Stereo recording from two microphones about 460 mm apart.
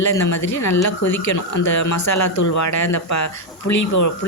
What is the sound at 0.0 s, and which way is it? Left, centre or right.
Speech, left.